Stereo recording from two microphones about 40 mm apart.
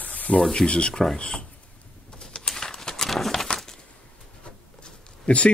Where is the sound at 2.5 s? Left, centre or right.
Centre.